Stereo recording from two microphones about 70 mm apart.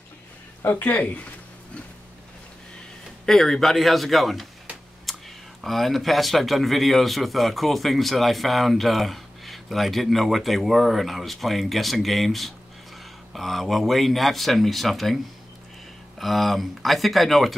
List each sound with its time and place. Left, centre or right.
0.7 s speech: left
3.3 s a man's voice: centre
5.1 s a sound: centre
5.6 s a man's voice: centre
16.2 s a man's voice: centre